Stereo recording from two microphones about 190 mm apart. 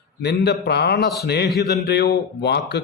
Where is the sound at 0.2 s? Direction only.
60° left (ahead or behind).